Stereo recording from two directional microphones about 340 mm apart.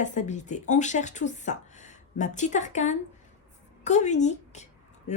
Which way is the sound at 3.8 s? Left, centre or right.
Centre.